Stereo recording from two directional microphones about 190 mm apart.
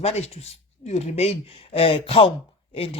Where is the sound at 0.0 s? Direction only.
35° left (ahead or behind).